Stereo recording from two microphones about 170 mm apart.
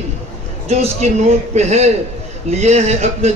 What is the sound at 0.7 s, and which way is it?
A man's voice, 40° right (ahead or behind).